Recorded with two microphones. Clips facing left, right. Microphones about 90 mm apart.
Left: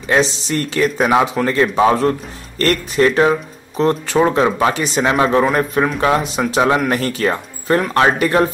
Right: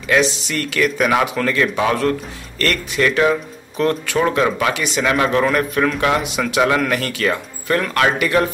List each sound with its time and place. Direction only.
0.0 s speech: 35° left (ahead or behind)